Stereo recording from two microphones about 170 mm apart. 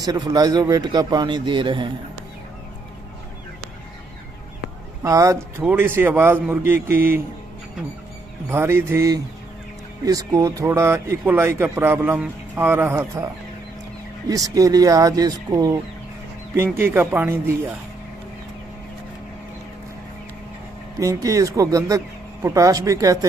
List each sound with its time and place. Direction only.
0.0 s speech: 25° right (ahead or behind)
5.0 s speech: 20° right (ahead or behind)
8.5 s speech: 15° right (ahead or behind)
14.3 s speech: 20° right (ahead or behind)
21.0 s speech: 20° right (ahead or behind)